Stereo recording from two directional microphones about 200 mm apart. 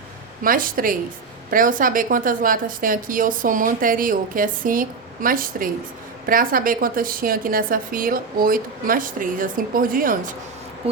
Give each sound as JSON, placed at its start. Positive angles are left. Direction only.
{"t": 0.4, "sound": "a woman's voice", "side_deg": -45}